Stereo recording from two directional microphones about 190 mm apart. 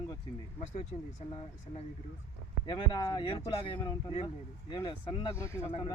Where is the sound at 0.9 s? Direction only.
40° left (ahead or behind).